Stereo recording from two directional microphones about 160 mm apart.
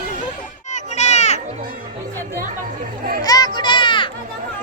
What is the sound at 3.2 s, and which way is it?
Children playing, 25° left (ahead or behind).